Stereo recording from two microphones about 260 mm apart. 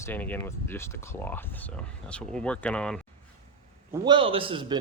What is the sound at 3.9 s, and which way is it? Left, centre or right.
Speech, centre.